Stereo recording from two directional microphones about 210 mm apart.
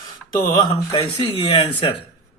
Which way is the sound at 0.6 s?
25° left (ahead or behind).